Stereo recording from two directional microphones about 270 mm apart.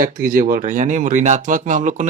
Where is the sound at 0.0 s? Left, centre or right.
Right.